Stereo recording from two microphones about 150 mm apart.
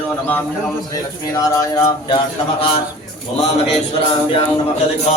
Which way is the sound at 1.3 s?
20° left (ahead or behind).